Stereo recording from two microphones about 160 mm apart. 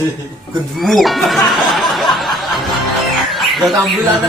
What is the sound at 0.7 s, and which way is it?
Music, centre (ahead or behind).